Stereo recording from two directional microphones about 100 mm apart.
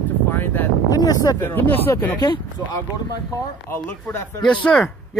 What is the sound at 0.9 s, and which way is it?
Speech, 35° left (ahead or behind).